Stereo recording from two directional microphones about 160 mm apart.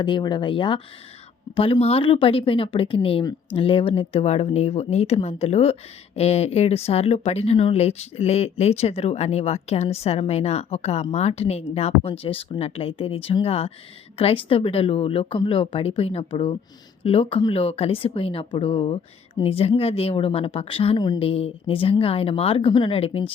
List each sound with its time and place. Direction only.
0.0 s speech: 30° left (ahead or behind)